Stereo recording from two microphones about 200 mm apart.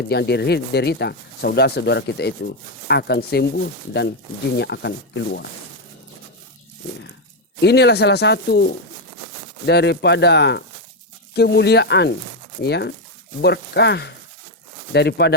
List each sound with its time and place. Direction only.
0.1 s speech: 55° left (ahead or behind)
7.6 s speech: 55° left (ahead or behind)